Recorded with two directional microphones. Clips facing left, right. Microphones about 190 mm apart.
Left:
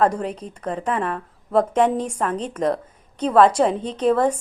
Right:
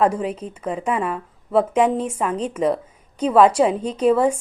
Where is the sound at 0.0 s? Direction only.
5° right (ahead or behind).